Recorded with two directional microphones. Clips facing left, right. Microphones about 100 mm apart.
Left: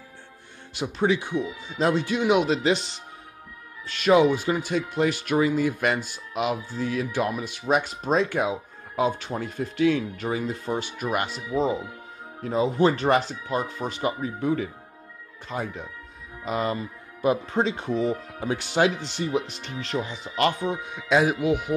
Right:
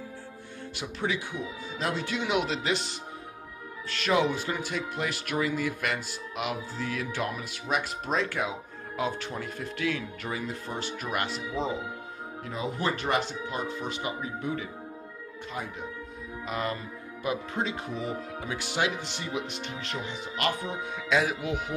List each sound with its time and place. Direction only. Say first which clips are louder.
0.7 s speech: left 8 dB; 25° left (ahead or behind)
12.4 s speech: left 10 dB; 30° left (ahead or behind)
16.4 s speech: left 6 dB; 25° left (ahead or behind)
21.1 s speech: left 6 dB; 20° left (ahead or behind)